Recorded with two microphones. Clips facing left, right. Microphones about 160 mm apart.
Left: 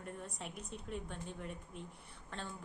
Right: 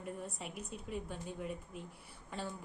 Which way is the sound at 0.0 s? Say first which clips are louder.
Right 3 dB; 5° right (ahead or behind).